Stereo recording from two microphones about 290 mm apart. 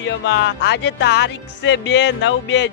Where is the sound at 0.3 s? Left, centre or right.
Left.